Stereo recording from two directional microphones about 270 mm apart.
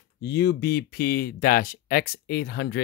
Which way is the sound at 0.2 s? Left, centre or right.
Left.